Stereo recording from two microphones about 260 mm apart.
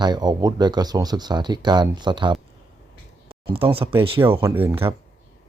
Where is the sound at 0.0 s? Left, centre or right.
Centre.